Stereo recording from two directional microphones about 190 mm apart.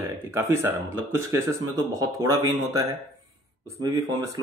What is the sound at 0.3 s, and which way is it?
Speech, 15° right (ahead or behind).